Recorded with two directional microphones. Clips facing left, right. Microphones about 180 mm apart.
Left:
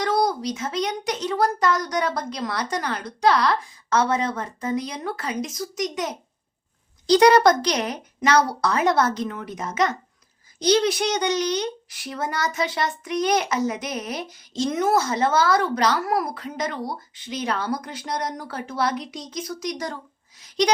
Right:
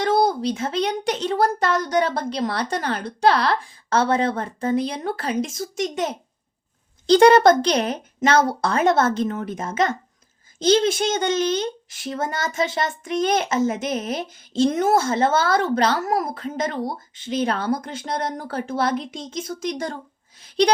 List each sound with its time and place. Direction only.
0.0 s speech: 25° right (ahead or behind)
7.1 s speech: 25° right (ahead or behind)
9.2 s child singing: 45° right (ahead or behind)
9.6 s speech: 25° right (ahead or behind)
12.7 s child singing: 50° right (ahead or behind)
13.1 s speech: 25° right (ahead or behind)
17.4 s speech: 55° right (ahead or behind)
17.8 s speech: 25° right (ahead or behind)
18.3 s child singing: 55° right (ahead or behind)
18.6 s speech: 30° right (ahead or behind)